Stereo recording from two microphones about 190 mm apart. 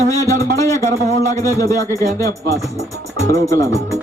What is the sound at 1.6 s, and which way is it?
Speech, 15° left (ahead or behind).